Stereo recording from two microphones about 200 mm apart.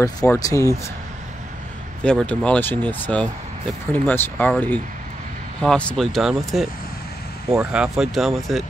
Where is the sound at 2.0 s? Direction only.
5° left (ahead or behind).